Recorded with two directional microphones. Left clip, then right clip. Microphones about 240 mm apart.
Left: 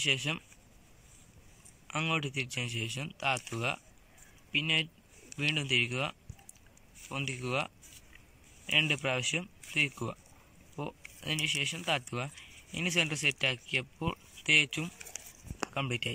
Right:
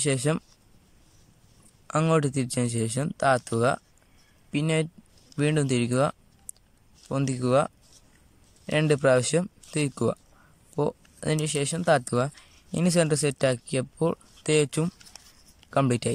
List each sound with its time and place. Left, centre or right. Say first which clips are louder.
0.0 s speech: right 4 dB; right
1.9 s speech: right 9 dB; right